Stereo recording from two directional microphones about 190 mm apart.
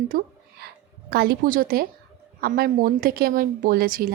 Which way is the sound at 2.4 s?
50° right (ahead or behind).